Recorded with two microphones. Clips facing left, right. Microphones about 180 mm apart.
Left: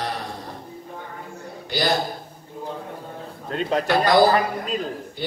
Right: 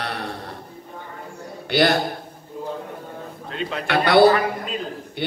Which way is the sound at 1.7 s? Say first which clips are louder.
Right 4 dB; 65° right (ahead or behind).